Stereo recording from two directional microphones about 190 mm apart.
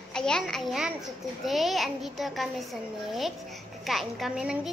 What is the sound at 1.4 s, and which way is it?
Child singing, centre (ahead or behind).